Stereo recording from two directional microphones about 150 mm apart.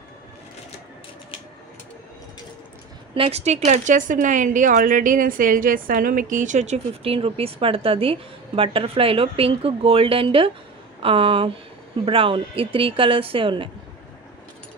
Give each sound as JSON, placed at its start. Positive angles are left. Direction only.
{"t": 3.2, "sound": "speech", "side_deg": -45}